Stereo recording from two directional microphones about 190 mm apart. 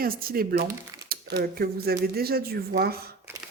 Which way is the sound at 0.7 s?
15° right (ahead or behind).